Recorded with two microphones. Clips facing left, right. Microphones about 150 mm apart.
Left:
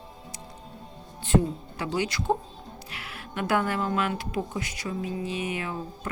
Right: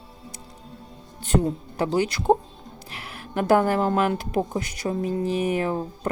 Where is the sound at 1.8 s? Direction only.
40° right (ahead or behind).